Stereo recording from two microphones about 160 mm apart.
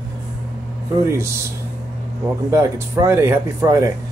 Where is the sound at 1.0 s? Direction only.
15° right (ahead or behind).